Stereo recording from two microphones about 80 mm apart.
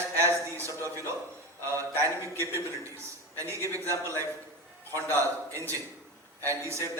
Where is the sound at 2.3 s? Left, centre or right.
Right.